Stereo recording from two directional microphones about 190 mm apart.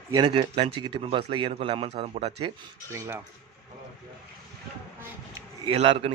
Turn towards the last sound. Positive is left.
turn(degrees=-30)  # may be behind; listen again after turning